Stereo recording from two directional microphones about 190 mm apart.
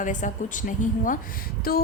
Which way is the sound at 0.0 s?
40° left (ahead or behind).